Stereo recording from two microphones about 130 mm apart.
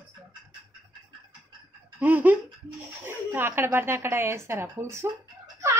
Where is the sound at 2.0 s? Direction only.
15° right (ahead or behind).